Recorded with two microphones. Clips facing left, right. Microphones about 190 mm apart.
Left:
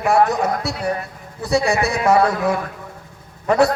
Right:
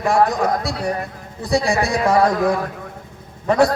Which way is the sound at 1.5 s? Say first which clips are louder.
Even; 35° right (ahead or behind).